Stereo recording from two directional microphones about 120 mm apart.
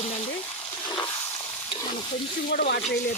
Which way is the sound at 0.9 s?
40° left (ahead or behind).